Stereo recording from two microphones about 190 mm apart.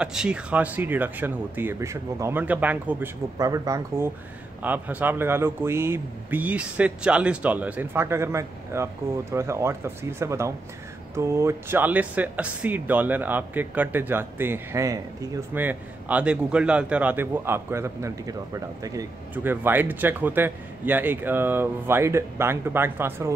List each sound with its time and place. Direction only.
0.0 s a man's voice: 5° right (ahead or behind)